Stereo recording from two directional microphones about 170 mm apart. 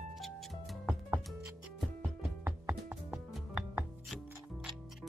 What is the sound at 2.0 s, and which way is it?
Music, 15° right (ahead or behind).